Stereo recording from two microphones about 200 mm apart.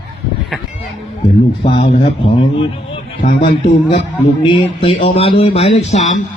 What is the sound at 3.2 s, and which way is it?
Speech, 45° left (ahead or behind).